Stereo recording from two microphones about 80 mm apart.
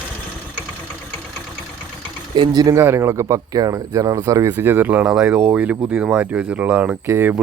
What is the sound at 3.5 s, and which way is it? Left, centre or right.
Speech, right.